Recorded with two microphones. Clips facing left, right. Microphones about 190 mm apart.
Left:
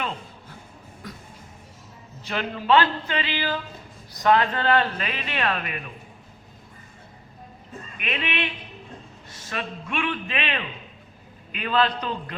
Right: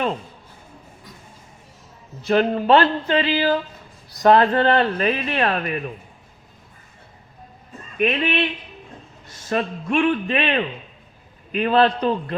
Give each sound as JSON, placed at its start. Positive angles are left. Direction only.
{"t": 2.2, "sound": "speech", "side_deg": -40}
{"t": 7.9, "sound": "speech", "side_deg": -40}
{"t": 9.5, "sound": "speech", "side_deg": -40}